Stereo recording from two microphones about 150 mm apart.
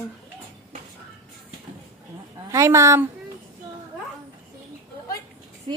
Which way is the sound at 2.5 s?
20° right (ahead or behind).